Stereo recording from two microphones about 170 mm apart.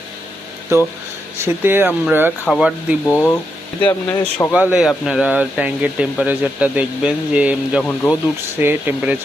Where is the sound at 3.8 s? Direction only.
30° left (ahead or behind).